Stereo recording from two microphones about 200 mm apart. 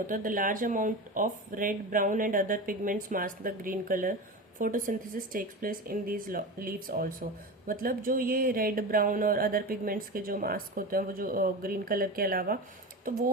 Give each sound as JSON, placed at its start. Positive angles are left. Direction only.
{"t": 0.1, "sound": "speech", "side_deg": -40}